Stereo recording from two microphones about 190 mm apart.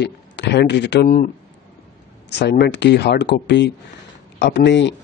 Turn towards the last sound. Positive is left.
turn(degrees=65)  # may be behind; listen again after turning